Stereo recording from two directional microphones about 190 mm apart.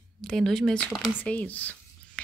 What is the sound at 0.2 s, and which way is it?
Speech, 5° left (ahead or behind).